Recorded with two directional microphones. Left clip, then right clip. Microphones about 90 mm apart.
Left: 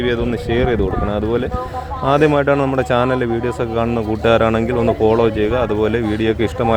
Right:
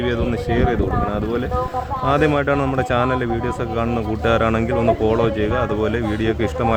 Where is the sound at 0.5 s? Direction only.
25° left (ahead or behind).